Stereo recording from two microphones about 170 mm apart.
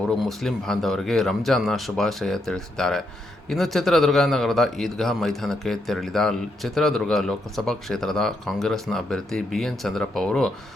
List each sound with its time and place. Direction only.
0.2 s speech: centre (ahead or behind)